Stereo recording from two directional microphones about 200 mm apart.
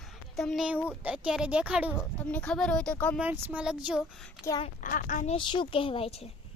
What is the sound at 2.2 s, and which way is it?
Speech, 5° left (ahead or behind).